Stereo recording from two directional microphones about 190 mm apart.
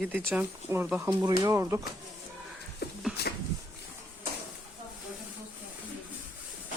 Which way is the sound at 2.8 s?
60° left (ahead or behind).